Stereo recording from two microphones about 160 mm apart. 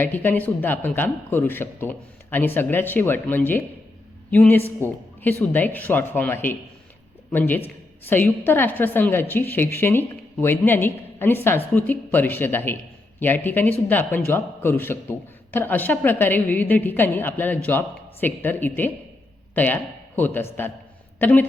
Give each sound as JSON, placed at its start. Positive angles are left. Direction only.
{"t": 0.0, "sound": "a woman's voice", "side_deg": 10}